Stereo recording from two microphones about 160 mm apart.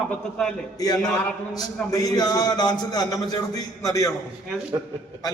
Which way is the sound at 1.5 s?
25° left (ahead or behind).